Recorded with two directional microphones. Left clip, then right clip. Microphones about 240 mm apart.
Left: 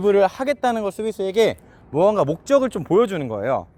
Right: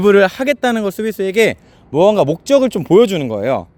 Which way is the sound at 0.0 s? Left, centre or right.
Right.